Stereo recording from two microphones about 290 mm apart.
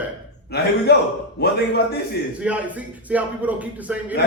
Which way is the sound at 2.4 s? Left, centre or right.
Centre.